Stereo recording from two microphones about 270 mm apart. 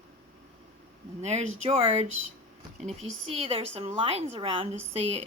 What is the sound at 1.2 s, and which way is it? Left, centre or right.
Speech, right.